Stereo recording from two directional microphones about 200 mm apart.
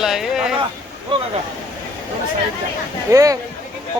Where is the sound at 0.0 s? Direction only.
Centre (ahead or behind).